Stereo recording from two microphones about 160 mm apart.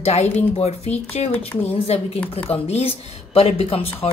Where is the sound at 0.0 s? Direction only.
40° left (ahead or behind).